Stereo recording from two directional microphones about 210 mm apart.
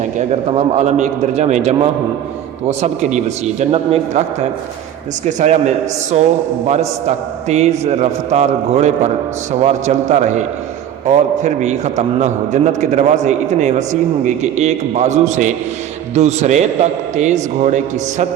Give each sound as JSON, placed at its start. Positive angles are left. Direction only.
{"t": 0.2, "sound": "a man's voice", "side_deg": -30}
{"t": 5.2, "sound": "a man's voice", "side_deg": -35}
{"t": 7.4, "sound": "a man's voice", "side_deg": -30}
{"t": 11.4, "sound": "a man's voice", "side_deg": -35}